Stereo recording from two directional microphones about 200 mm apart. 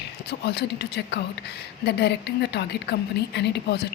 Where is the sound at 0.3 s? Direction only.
55° left (ahead or behind).